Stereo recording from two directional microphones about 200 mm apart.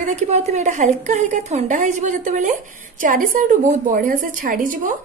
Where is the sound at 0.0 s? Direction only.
35° right (ahead or behind).